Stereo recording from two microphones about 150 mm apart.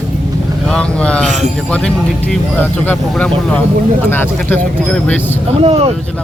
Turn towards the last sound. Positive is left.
turn(degrees=-40)  # may be behind; listen again after turning